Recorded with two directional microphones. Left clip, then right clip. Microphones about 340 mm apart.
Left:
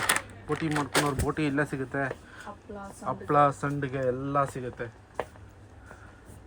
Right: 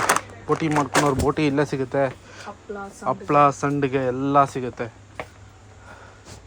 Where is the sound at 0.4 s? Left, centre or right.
Centre.